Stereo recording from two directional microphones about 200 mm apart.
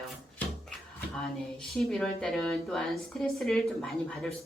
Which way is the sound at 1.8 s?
5° left (ahead or behind).